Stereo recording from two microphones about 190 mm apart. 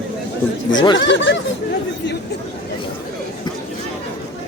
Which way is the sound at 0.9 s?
70° left (ahead or behind).